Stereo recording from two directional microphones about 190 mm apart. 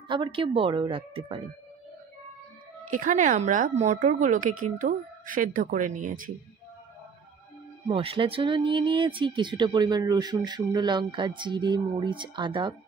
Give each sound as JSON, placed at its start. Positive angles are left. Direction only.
{"t": 0.1, "sound": "speech", "side_deg": -25}
{"t": 2.9, "sound": "a woman's voice", "side_deg": -45}
{"t": 7.9, "sound": "speech", "side_deg": -30}